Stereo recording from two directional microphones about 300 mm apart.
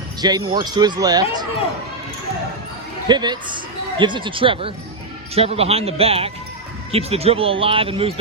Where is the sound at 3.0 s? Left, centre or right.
Centre.